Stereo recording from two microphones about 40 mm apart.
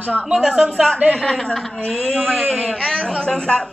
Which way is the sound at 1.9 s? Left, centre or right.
Left.